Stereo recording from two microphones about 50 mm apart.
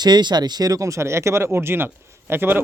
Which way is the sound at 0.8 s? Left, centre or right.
Right.